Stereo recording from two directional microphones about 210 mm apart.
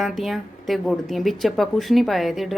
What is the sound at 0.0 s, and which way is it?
Speech, centre (ahead or behind).